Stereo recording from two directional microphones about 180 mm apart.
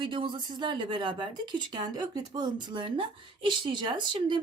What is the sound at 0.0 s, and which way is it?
A woman's voice, 25° right (ahead or behind).